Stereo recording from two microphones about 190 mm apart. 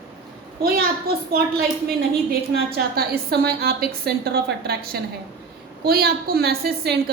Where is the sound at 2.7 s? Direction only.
55° right (ahead or behind).